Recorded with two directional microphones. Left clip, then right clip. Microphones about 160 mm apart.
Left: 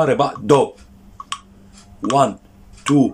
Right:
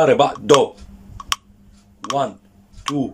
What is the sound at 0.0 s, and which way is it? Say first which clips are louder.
Speech: right 3 dB; centre (ahead or behind).